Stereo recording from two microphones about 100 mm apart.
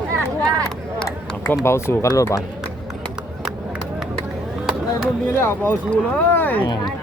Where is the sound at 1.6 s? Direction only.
25° left (ahead or behind).